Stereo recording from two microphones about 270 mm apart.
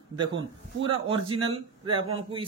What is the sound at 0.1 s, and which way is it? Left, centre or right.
A man's voice, centre.